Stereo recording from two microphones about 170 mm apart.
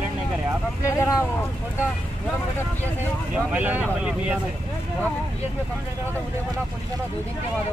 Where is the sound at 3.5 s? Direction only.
10° right (ahead or behind).